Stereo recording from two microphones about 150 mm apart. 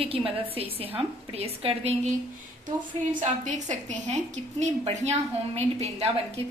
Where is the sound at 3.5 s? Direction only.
55° right (ahead or behind).